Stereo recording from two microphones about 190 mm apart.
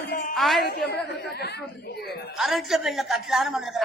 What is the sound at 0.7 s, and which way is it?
Speech, 60° left (ahead or behind).